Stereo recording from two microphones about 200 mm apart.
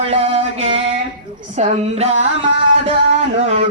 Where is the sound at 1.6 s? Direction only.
35° right (ahead or behind).